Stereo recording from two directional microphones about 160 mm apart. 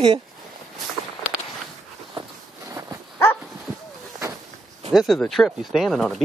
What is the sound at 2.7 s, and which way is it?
Dog, 20° right (ahead or behind).